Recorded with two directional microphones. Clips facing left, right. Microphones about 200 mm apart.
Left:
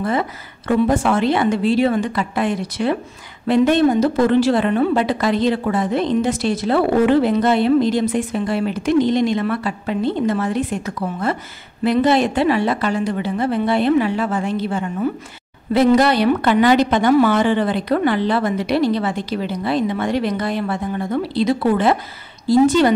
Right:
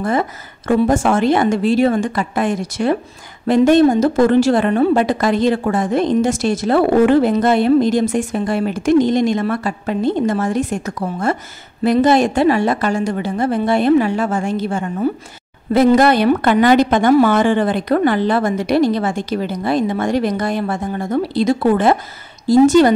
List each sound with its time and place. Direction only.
0.0 s a woman's voice: 45° right (ahead or behind)